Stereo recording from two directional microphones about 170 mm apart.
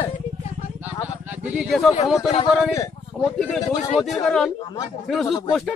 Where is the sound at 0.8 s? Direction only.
10° right (ahead or behind).